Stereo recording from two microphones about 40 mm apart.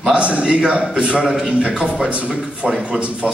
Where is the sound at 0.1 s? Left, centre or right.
Right.